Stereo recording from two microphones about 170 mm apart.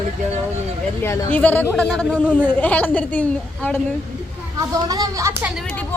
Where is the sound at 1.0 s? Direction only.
10° left (ahead or behind).